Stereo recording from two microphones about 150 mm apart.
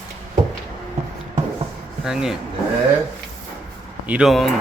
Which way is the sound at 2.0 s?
5° right (ahead or behind).